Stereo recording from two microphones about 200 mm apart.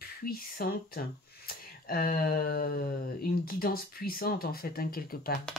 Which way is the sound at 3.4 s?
50° left (ahead or behind).